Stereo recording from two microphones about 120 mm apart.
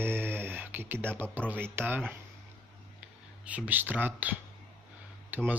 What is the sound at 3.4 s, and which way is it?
Speech, 10° right (ahead or behind).